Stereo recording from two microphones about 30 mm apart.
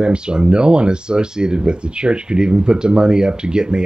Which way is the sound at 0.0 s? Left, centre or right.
Right.